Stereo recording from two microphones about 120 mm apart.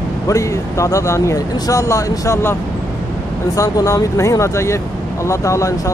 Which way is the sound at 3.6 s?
30° left (ahead or behind).